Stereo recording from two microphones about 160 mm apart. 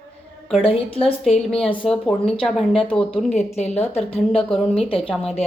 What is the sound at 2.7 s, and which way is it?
A woman's voice, 35° left (ahead or behind).